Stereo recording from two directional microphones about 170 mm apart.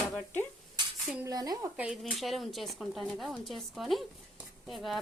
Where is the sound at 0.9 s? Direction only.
Centre (ahead or behind).